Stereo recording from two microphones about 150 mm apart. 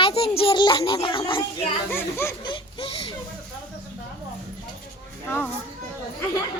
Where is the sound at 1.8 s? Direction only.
15° left (ahead or behind).